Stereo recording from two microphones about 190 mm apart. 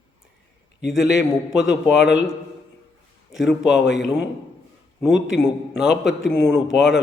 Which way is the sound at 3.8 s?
70° left (ahead or behind).